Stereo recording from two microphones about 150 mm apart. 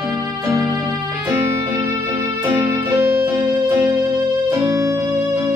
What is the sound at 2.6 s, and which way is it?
Music, 10° right (ahead or behind).